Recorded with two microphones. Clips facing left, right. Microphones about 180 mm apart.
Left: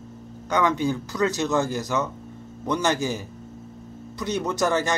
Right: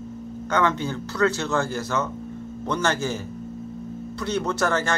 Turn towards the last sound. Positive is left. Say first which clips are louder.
# left 1 dB
turn(degrees=15)  # may be behind; listen again after turning